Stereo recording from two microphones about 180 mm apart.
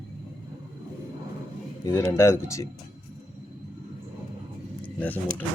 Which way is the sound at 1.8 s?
15° left (ahead or behind).